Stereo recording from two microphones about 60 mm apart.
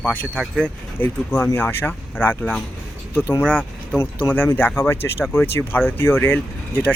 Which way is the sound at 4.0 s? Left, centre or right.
Left.